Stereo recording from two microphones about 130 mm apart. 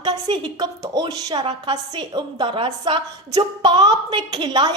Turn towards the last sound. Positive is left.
turn(degrees=-35)  # may be behind; listen again after turning